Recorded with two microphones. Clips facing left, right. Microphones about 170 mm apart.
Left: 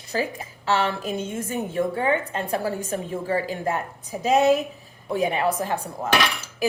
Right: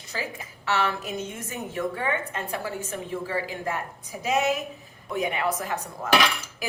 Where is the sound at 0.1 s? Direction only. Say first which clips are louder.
Left 7 dB; 35° left (ahead or behind).